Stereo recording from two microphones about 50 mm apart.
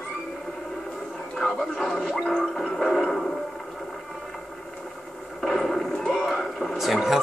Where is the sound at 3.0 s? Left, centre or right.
Centre.